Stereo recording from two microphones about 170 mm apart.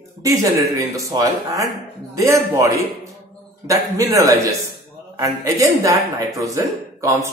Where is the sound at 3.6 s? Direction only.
20° right (ahead or behind).